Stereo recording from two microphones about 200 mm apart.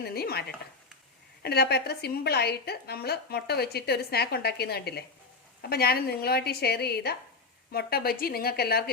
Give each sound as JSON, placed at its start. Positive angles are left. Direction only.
{"t": 0.0, "sound": "stir", "side_deg": 50}
{"t": 1.4, "sound": "a woman's voice", "side_deg": 55}